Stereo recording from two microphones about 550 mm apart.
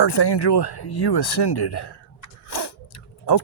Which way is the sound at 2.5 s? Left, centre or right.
Left.